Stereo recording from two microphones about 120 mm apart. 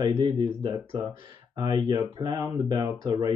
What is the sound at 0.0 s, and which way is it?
Speech, 40° right (ahead or behind).